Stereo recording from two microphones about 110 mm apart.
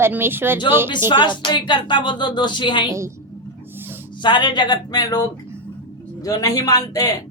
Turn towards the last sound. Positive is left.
turn(degrees=35)  # may be behind; listen again after turning